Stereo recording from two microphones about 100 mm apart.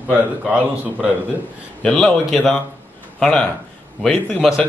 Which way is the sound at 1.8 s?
5° left (ahead or behind).